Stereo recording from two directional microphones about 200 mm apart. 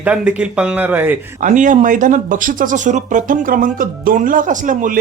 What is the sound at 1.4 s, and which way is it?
Speech, 40° right (ahead or behind).